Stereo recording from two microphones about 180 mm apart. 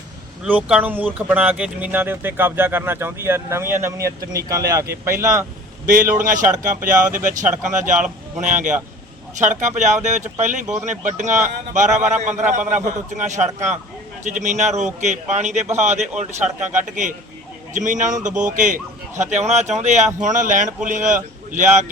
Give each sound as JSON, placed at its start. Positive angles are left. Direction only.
{"t": 0.4, "sound": "speech", "side_deg": -10}
{"t": 5.8, "sound": "a man's voice", "side_deg": -50}